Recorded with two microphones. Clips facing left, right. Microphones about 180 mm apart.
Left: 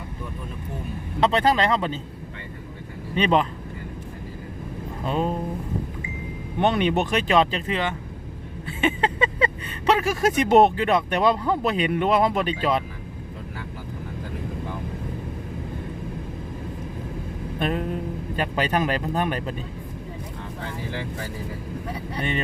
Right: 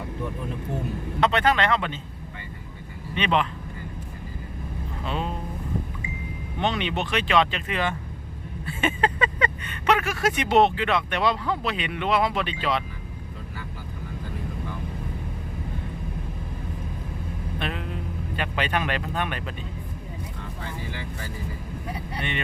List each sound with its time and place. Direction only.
1.2 s speech: 35° left (ahead or behind)
3.2 s speech: 40° left (ahead or behind)
5.0 s speech: 45° left (ahead or behind)
6.6 s speech: 50° left (ahead or behind)
7.7 s speech: 25° left (ahead or behind); by 12.8 s 45° left (ahead or behind)
17.6 s a sound: 45° left (ahead or behind)
18.3 s speech: 40° left (ahead or behind)